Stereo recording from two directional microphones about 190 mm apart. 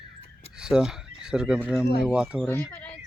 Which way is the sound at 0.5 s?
5° right (ahead or behind).